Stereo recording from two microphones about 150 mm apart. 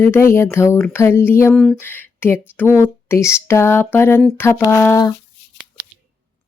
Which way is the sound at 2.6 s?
15° left (ahead or behind).